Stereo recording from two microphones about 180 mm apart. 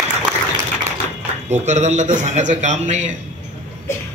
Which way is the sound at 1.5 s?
40° right (ahead or behind).